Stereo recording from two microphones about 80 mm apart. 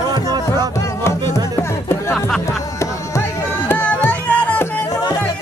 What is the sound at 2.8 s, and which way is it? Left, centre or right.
Music, left.